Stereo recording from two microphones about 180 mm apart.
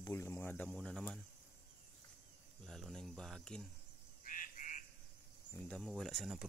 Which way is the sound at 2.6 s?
Centre (ahead or behind).